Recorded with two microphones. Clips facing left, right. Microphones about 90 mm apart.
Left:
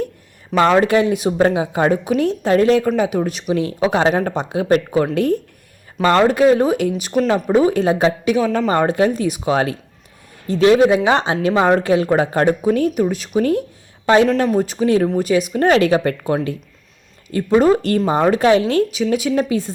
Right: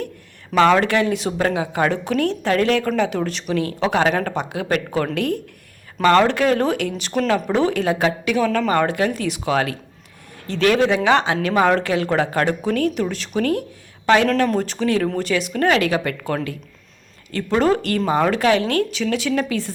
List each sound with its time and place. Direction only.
0.5 s speech: 15° left (ahead or behind)
7.3 s speech: 30° left (ahead or behind)
7.5 s speech: 20° left (ahead or behind)
14.4 s speech: 10° left (ahead or behind)
15.6 s speech: 30° left (ahead or behind)